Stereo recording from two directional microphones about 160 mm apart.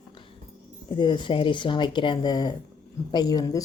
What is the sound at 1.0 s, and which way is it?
Speech, 30° left (ahead or behind).